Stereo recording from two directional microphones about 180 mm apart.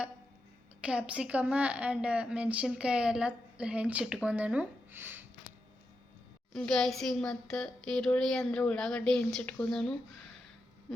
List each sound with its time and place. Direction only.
0.8 s a woman's voice: 5° right (ahead or behind)
6.5 s speech: 5° left (ahead or behind)